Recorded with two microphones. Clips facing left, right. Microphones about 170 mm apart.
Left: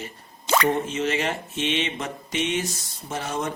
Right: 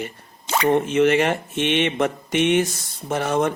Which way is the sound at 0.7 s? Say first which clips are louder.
Right 8 dB; 60° right (ahead or behind).